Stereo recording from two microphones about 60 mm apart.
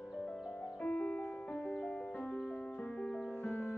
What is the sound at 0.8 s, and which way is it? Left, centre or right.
Music, left.